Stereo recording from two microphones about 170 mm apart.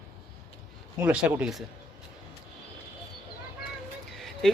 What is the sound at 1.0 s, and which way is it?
Speech, 5° right (ahead or behind).